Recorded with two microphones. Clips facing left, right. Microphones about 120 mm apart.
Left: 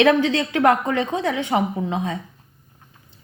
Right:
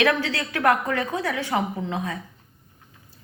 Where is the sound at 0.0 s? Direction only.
20° left (ahead or behind).